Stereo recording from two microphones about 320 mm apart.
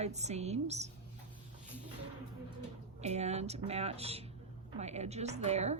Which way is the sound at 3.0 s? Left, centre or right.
Centre.